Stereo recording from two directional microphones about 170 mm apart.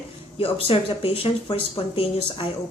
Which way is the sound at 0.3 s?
35° left (ahead or behind).